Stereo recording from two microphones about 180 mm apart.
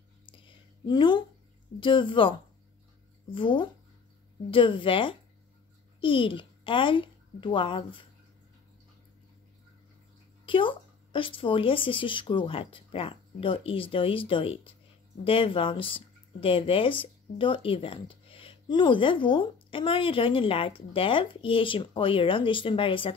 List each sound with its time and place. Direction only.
0.8 s speech: 25° left (ahead or behind)
3.3 s a child's voice: 25° left (ahead or behind)
10.4 s speech: 30° left (ahead or behind)